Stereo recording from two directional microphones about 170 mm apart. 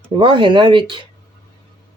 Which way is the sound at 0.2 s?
30° right (ahead or behind).